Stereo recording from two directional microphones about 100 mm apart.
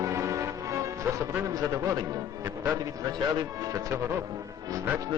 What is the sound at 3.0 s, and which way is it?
Music, 35° right (ahead or behind).